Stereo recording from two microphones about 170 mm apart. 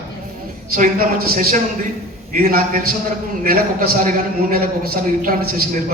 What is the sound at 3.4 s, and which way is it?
Speech, 60° right (ahead or behind).